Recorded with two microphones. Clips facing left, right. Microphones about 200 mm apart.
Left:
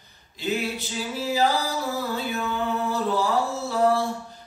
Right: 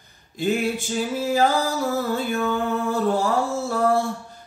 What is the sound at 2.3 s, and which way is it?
Music, 50° right (ahead or behind).